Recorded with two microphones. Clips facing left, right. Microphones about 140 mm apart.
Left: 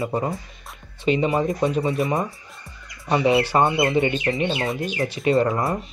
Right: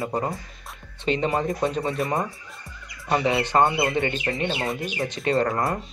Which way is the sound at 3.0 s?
15° left (ahead or behind).